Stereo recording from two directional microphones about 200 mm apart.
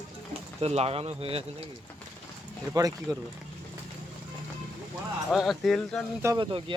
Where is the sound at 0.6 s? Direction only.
30° right (ahead or behind).